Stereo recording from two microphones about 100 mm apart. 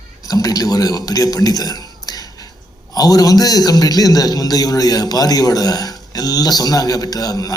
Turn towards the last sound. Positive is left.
turn(degrees=40)  # may be behind; listen again after turning